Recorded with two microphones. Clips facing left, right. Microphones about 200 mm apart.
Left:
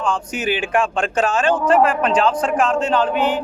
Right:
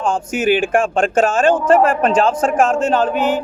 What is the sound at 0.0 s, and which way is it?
Speech, 45° right (ahead or behind).